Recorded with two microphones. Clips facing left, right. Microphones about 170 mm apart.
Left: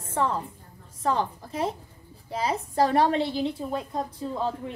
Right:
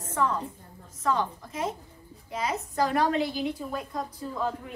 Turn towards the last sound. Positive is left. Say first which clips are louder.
# left 3 dB
turn(degrees=30)  # may be behind; listen again after turning